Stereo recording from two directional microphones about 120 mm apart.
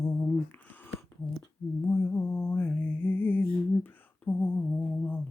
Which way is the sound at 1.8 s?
20° left (ahead or behind).